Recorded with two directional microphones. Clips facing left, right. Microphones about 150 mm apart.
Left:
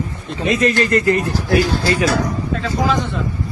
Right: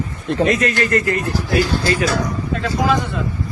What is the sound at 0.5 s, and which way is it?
Speech, 25° left (ahead or behind).